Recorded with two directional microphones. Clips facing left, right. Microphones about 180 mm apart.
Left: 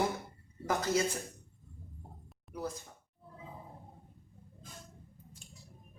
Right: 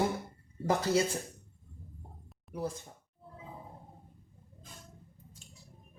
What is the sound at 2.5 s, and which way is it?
Speech, 30° right (ahead or behind).